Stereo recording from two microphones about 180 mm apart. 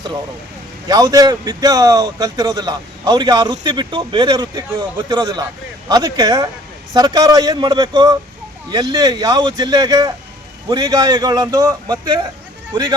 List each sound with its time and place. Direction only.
0.9 s speech: 20° right (ahead or behind)